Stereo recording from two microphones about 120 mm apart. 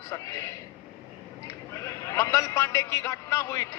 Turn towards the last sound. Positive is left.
turn(degrees=25)  # may be behind; listen again after turning